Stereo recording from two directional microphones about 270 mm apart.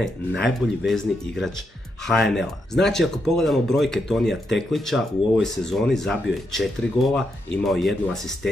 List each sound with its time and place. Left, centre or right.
0.4 s speech: centre